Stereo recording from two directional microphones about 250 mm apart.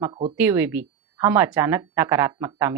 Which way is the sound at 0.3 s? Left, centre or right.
Centre.